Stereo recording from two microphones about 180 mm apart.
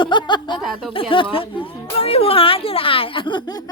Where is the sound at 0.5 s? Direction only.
Centre (ahead or behind).